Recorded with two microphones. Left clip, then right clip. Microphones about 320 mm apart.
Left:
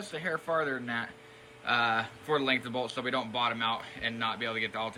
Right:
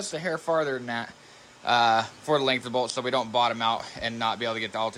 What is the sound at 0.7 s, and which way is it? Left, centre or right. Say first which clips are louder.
Speech: right 3 dB; centre.